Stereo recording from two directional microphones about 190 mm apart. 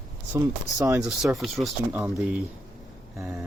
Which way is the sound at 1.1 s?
Centre (ahead or behind).